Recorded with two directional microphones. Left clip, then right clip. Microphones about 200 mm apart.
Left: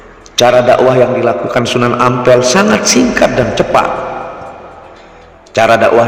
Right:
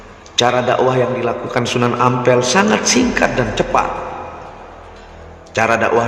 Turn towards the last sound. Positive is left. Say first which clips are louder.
# left 7 dB
turn(degrees=25)  # may be behind; listen again after turning